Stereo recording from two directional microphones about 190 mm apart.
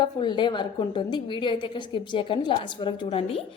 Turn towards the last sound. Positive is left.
turn(degrees=30)  # may be behind; listen again after turning